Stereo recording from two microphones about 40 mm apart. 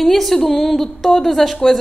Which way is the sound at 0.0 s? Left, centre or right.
Centre.